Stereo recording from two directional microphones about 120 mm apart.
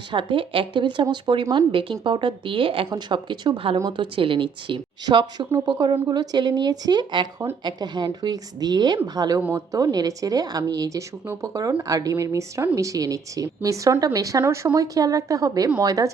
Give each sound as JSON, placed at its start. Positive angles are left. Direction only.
{"t": 0.1, "sound": "a woman's voice", "side_deg": -45}
{"t": 9.4, "sound": "a woman's voice", "side_deg": -20}
{"t": 9.7, "sound": "a woman's voice", "side_deg": -30}